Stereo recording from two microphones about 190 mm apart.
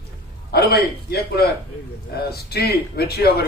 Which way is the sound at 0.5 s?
55° left (ahead or behind).